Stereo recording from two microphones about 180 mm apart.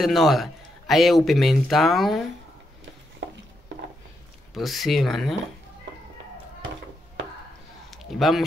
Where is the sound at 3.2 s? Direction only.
80° right.